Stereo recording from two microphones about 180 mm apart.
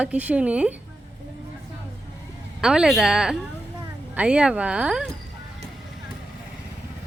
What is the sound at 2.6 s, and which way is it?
A woman's voice, 5° right (ahead or behind).